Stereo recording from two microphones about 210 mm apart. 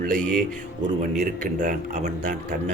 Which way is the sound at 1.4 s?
40° right (ahead or behind).